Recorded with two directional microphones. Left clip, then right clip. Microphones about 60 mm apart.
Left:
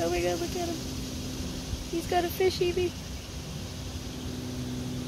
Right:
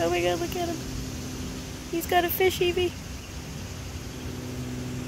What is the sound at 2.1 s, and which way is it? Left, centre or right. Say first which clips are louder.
Speech: right 4 dB; right.